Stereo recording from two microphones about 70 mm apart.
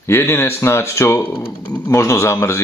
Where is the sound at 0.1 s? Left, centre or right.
Left.